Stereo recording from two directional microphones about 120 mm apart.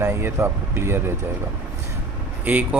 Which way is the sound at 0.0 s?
20° right (ahead or behind).